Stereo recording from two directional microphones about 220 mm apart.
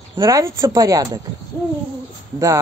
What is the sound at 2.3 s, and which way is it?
Speech, 15° right (ahead or behind).